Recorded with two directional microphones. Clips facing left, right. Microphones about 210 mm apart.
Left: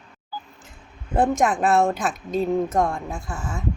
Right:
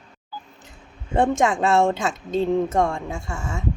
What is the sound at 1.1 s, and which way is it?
Speech, 25° right (ahead or behind).